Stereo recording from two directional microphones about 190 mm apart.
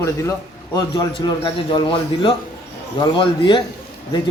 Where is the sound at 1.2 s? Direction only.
25° left (ahead or behind).